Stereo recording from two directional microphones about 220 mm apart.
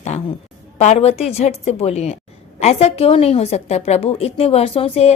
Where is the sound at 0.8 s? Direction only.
30° left (ahead or behind).